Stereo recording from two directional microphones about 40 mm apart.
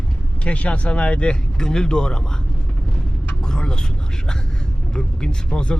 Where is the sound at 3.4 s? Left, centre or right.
Centre.